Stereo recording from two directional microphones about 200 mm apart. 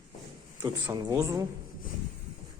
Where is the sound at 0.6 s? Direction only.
15° right (ahead or behind).